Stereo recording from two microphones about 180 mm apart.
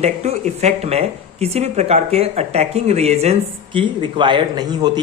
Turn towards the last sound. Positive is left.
turn(degrees=-20)  # may be behind; listen again after turning